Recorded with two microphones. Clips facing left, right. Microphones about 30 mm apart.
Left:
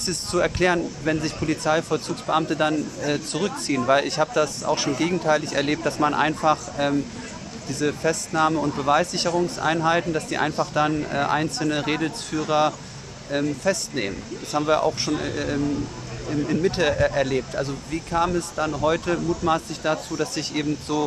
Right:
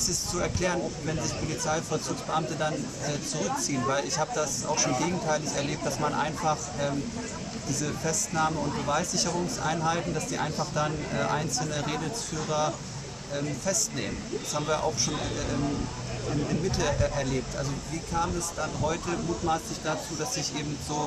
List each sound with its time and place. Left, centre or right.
0.0 s speech: left
9.3 s speech: left
9.8 s speech: left
16.6 s speech: left